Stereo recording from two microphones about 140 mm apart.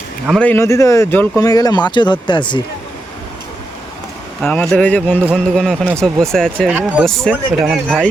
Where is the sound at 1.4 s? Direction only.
30° left (ahead or behind).